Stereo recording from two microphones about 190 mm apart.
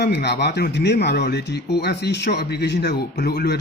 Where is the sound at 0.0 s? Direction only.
60° left (ahead or behind).